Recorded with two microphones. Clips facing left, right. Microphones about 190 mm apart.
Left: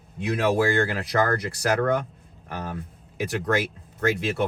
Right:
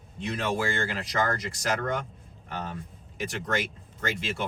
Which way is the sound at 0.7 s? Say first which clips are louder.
Left 6 dB; 60° left (ahead or behind).